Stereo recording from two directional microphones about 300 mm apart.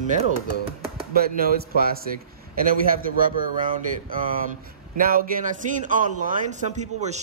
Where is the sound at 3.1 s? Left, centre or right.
Right.